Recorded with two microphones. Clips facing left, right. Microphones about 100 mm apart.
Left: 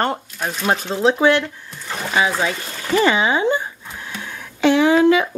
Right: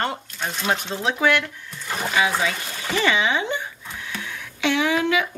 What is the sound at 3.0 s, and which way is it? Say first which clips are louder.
Speech: left 4 dB; 40° left (ahead or behind).